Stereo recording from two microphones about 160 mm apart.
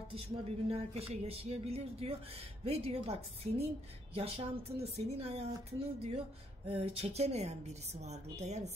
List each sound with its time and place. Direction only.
0.7 s a woman's voice: 40° right (ahead or behind)